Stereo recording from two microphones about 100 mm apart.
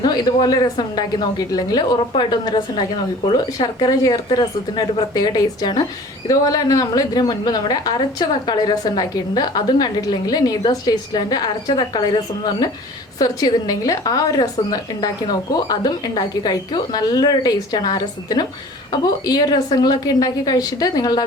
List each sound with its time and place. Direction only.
0.0 s a woman's voice: 40° left (ahead or behind)
13.1 s a woman's voice: 40° left (ahead or behind)